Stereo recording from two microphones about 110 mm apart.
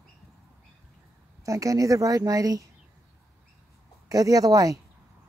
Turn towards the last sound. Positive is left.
turn(degrees=-30)  # may be behind; listen again after turning